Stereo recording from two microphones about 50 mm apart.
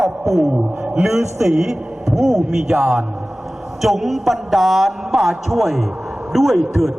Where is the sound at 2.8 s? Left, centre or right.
Right.